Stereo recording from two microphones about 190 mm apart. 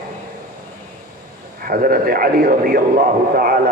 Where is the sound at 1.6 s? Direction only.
50° right (ahead or behind).